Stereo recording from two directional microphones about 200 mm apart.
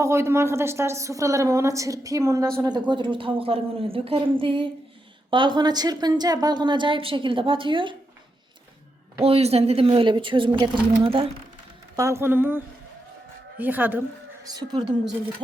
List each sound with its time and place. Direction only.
0.0 s a woman's voice: 15° right (ahead or behind)
9.2 s a woman's voice: 30° right (ahead or behind)
11.9 s speech: 15° right (ahead or behind)
14.4 s a woman's voice: 20° right (ahead or behind)